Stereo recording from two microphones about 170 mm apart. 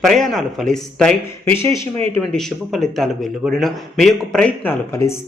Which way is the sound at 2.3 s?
Centre (ahead or behind).